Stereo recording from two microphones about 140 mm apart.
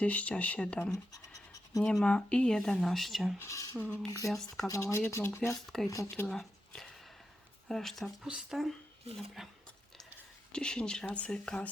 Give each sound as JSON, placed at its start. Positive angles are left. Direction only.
{"t": 0.0, "sound": "speech", "side_deg": 10}
{"t": 3.3, "sound": "speech", "side_deg": 20}
{"t": 3.8, "sound": "speech", "side_deg": 10}
{"t": 4.7, "sound": "speech", "side_deg": 20}
{"t": 5.5, "sound": "speech", "side_deg": 5}
{"t": 6.2, "sound": "a sound", "side_deg": 5}
{"t": 7.7, "sound": "speech", "side_deg": 5}